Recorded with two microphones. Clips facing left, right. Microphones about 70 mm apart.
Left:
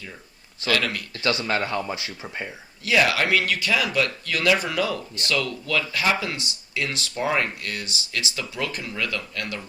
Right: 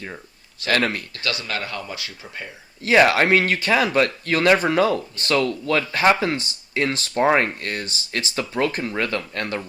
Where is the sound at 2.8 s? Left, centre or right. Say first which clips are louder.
Right 5 dB; right.